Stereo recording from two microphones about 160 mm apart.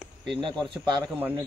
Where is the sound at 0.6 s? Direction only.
30° right (ahead or behind).